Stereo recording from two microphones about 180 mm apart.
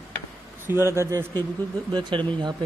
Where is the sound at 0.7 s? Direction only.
15° right (ahead or behind).